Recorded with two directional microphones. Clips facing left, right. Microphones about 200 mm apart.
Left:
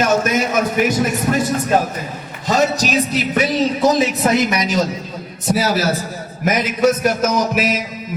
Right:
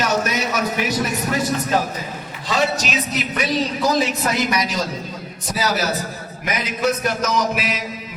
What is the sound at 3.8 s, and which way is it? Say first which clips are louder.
Speech: left 5 dB; 25° left (ahead or behind).